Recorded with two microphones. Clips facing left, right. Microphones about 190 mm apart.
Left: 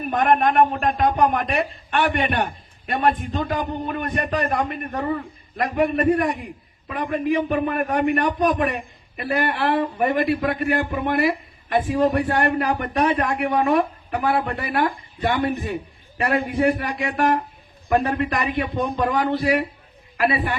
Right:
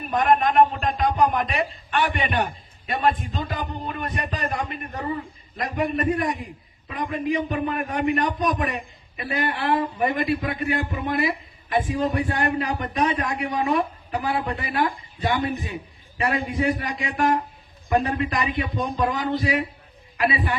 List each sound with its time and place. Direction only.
0.1 s a man's voice: 55° left (ahead or behind)